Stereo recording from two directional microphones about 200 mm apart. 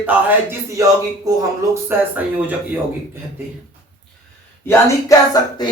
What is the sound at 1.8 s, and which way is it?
Speech, 10° right (ahead or behind).